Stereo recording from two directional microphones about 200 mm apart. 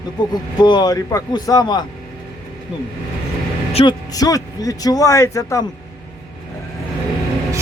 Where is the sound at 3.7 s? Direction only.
25° left (ahead or behind).